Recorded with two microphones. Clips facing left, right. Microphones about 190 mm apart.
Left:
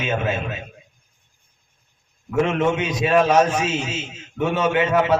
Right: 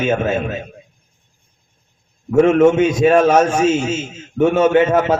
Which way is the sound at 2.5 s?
50° right (ahead or behind).